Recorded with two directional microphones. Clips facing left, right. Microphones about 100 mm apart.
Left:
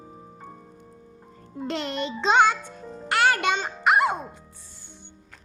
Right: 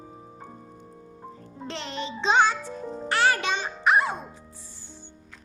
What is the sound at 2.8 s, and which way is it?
Music, 20° right (ahead or behind).